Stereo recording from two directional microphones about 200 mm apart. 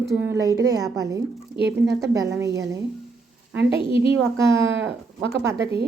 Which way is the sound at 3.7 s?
25° left (ahead or behind).